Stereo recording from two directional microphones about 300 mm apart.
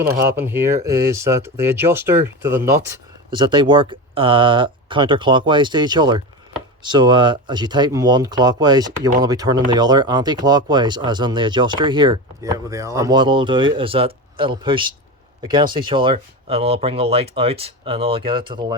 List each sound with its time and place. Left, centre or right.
0.2 s speech: centre